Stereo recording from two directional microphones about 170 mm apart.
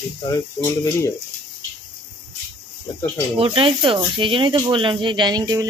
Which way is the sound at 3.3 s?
30° right (ahead or behind).